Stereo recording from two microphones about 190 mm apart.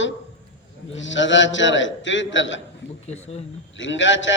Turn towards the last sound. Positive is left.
turn(degrees=75)  # may be behind; listen again after turning